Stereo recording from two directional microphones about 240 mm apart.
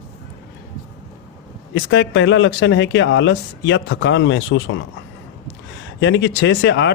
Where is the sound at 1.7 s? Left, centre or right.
Left.